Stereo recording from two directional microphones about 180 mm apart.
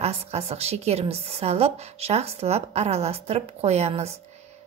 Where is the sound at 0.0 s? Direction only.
35° right (ahead or behind).